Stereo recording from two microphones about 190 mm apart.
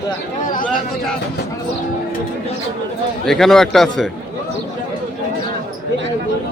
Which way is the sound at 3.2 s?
Centre (ahead or behind).